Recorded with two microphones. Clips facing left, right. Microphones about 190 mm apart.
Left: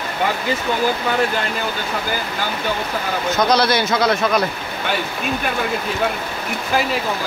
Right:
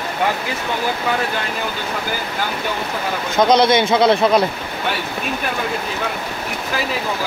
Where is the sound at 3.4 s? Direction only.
20° right (ahead or behind).